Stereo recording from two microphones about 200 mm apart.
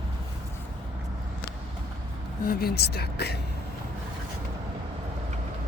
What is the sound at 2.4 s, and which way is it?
Speech, 50° left (ahead or behind).